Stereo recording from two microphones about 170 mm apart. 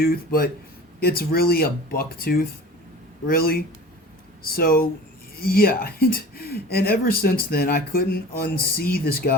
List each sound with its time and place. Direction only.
0.0 s speech: 60° left (ahead or behind)